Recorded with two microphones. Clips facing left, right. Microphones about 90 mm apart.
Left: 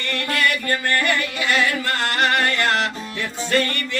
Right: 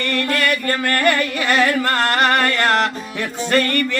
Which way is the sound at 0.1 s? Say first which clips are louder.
Right 1 dB; 45° right (ahead or behind).